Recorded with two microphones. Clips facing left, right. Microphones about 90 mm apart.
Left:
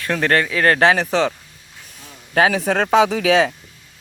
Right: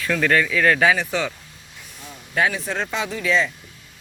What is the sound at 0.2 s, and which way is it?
Speech, 50° left (ahead or behind).